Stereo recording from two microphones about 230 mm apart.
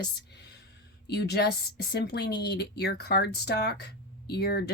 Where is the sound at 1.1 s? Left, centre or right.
Left.